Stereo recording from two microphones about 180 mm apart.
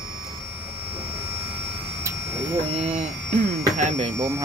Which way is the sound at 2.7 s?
35° right (ahead or behind).